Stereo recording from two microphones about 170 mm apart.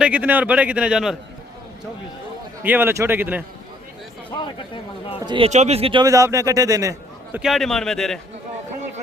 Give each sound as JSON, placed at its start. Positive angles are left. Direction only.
{"t": 0.0, "sound": "a man's voice", "side_deg": -10}
{"t": 2.6, "sound": "a man's voice", "side_deg": -10}
{"t": 4.3, "sound": "speech", "side_deg": 30}
{"t": 5.2, "sound": "speech", "side_deg": -30}
{"t": 5.5, "sound": "speech", "side_deg": -40}
{"t": 7.3, "sound": "a man's voice", "side_deg": 0}